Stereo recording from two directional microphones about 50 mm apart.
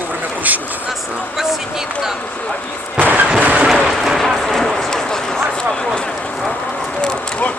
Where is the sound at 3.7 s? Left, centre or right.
Centre.